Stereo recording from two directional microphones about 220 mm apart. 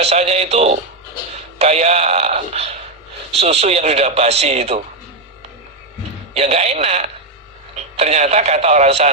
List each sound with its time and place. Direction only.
0.0 s speech: 30° right (ahead or behind)
6.3 s speech: 30° right (ahead or behind)